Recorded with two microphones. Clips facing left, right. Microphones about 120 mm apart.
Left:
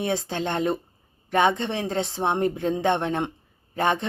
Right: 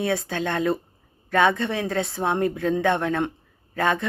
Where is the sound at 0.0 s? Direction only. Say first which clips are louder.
Right 1 dB; 25° left (ahead or behind).